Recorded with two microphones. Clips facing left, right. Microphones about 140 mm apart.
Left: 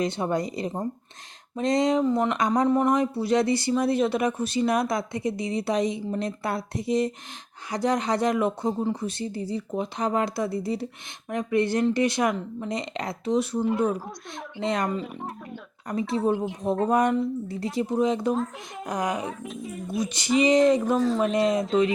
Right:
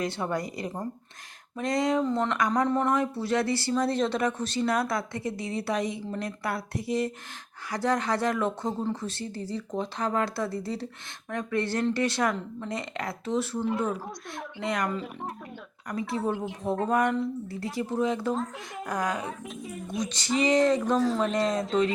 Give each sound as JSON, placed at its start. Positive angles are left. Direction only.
{"t": 0.0, "sound": "speech", "side_deg": 20}
{"t": 14.6, "sound": "speech", "side_deg": 25}
{"t": 15.9, "sound": "speech", "side_deg": 25}
{"t": 19.2, "sound": "speech", "side_deg": 0}